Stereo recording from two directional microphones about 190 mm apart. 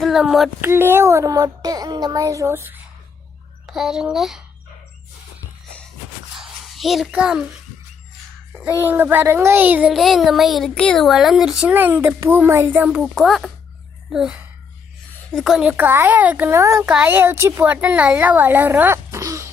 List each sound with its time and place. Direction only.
0.0 s speech: centre (ahead or behind)
0.6 s child singing: 10° right (ahead or behind)
3.7 s speech: centre (ahead or behind)
6.4 s a sound: centre (ahead or behind)
8.8 s child singing: 10° right (ahead or behind)
14.1 s speech: 5° right (ahead or behind)
15.3 s child singing: centre (ahead or behind); by 19.5 s 15° right (ahead or behind)